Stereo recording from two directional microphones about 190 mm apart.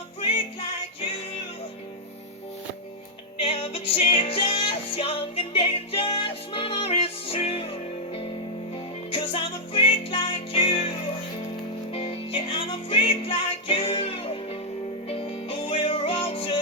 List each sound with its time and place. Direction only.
3.4 s music: 30° left (ahead or behind)